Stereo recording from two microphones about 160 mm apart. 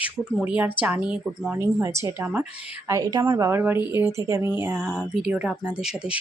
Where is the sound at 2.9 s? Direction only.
25° right (ahead or behind).